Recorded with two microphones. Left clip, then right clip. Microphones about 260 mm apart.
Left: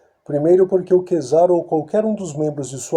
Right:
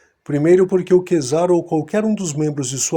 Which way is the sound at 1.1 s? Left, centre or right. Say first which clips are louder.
Left 2 dB; right.